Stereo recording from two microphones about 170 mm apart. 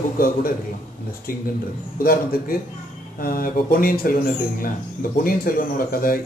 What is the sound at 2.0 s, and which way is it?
Speech, 60° left (ahead or behind).